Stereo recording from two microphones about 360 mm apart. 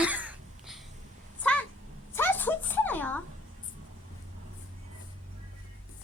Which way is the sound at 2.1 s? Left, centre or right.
Centre.